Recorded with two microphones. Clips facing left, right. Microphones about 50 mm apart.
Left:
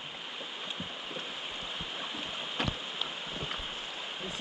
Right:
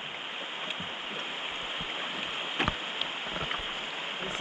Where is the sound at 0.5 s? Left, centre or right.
Right.